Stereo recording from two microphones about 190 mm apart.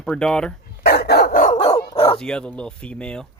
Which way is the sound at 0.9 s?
55° left (ahead or behind).